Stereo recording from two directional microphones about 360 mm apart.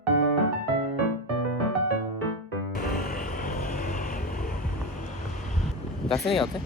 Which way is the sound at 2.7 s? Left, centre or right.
Left.